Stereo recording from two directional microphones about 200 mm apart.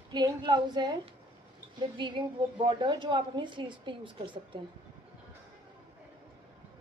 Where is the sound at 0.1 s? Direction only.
20° right (ahead or behind).